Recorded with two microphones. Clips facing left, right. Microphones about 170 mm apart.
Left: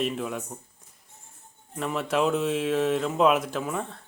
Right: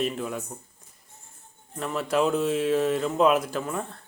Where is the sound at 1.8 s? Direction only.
Centre (ahead or behind).